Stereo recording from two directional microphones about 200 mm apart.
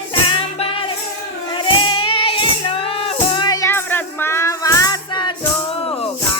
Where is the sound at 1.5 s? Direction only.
25° left (ahead or behind).